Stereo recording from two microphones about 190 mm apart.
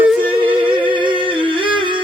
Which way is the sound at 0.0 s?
10° right (ahead or behind).